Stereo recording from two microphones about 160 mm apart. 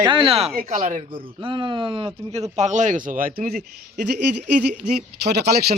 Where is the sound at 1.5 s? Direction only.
30° right (ahead or behind).